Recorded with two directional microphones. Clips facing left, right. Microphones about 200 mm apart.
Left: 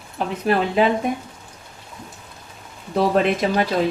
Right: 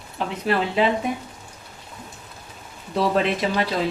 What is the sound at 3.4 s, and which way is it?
Speech, 45° left (ahead or behind).